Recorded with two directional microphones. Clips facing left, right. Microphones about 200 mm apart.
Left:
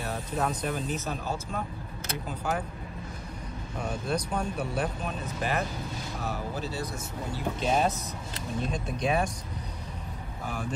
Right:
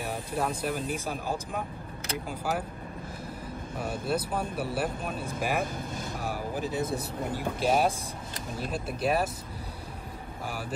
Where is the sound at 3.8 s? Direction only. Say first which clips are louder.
Right 1 dB; 5° right (ahead or behind).